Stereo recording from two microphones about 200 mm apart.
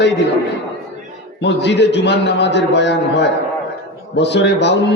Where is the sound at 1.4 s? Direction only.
60° left (ahead or behind).